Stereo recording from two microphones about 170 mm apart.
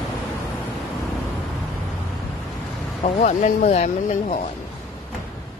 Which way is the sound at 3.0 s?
40° left (ahead or behind).